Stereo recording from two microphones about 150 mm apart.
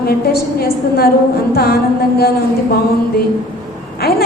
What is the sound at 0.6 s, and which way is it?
A woman's voice, 90° left.